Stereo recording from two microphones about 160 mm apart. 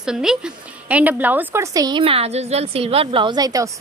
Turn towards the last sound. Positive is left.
turn(degrees=-20)  # may be behind; listen again after turning